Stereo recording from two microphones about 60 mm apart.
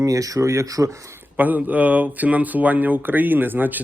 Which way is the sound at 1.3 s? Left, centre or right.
Right.